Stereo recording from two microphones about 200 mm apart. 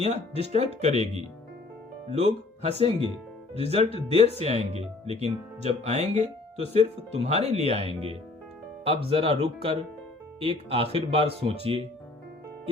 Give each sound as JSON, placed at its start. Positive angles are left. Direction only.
{"t": 0.0, "sound": "speech", "side_deg": -30}